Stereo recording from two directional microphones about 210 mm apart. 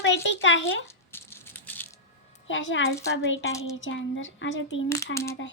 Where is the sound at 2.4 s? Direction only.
65° left (ahead or behind).